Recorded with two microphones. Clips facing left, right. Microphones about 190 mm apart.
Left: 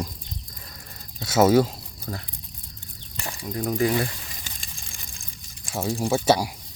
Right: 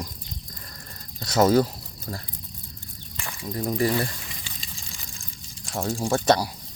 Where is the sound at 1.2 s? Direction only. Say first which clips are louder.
Left 1 dB; 5° left (ahead or behind).